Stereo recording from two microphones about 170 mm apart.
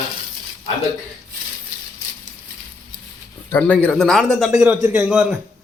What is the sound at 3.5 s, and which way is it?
Speech, 5° left (ahead or behind).